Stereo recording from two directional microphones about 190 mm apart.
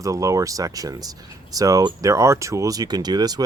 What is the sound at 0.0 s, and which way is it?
Speech, 15° right (ahead or behind).